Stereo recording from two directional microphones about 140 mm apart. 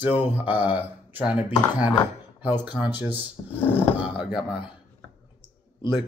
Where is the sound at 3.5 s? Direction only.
15° left (ahead or behind).